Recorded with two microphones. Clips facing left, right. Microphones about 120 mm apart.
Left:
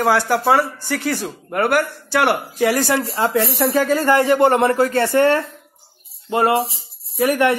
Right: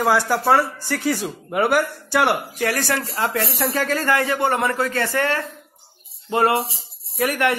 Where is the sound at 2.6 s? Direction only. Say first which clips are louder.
Left 5 dB; 15° left (ahead or behind).